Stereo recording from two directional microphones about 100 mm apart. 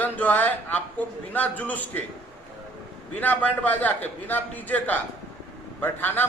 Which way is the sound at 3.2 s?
15° left (ahead or behind).